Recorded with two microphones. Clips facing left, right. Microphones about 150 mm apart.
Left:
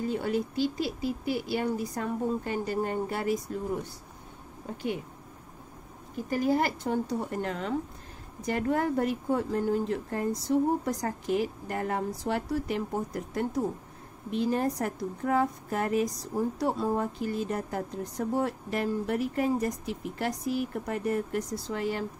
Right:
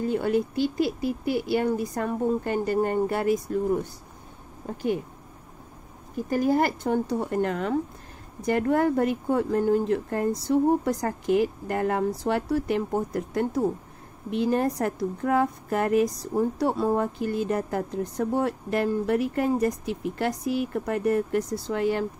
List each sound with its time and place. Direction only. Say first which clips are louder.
0.0 s a woman's voice: right 5 dB; 60° right (ahead or behind)
6.3 s a woman's voice: right 4 dB; 50° right (ahead or behind)